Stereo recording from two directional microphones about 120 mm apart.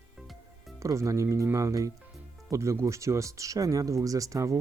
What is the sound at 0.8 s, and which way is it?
Speech, 25° right (ahead or behind).